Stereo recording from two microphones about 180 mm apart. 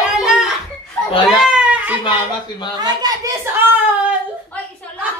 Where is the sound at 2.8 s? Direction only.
20° right (ahead or behind).